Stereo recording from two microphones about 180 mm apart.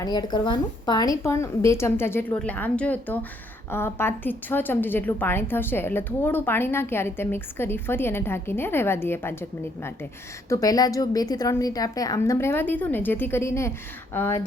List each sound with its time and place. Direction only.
0.0 s a woman's voice: 25° left (ahead or behind)